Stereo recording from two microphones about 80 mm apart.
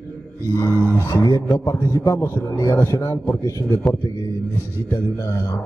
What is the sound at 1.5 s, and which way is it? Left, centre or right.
A man's voice, left.